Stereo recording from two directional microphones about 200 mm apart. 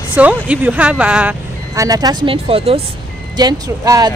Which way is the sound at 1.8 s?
20° right (ahead or behind).